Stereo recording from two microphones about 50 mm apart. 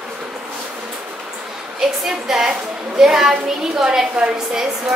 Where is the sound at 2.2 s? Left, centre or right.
Centre.